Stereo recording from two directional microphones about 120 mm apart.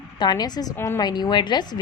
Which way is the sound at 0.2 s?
35° left (ahead or behind).